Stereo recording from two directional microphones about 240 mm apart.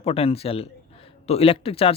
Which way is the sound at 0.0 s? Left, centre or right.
Left.